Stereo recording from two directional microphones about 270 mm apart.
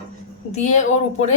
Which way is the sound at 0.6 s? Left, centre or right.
Left.